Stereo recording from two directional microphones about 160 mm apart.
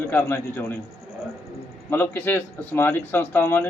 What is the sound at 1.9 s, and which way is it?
A man's voice, 10° left (ahead or behind).